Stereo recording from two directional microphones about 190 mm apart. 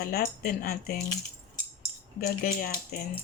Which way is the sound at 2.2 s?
50° left (ahead or behind).